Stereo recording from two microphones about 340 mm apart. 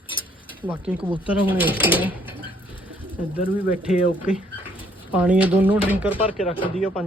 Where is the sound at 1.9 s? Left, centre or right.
Centre.